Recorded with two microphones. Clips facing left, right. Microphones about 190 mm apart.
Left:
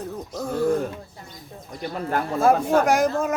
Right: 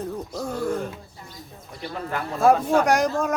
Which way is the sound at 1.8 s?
50° left (ahead or behind).